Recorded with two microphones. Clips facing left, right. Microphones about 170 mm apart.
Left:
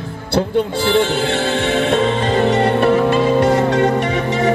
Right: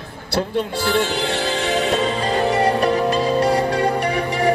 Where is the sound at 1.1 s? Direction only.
25° left (ahead or behind).